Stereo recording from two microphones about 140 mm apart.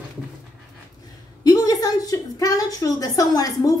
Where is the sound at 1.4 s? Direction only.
25° left (ahead or behind).